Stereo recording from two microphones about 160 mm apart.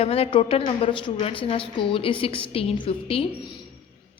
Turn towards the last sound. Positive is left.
turn(degrees=35)  # may be behind; listen again after turning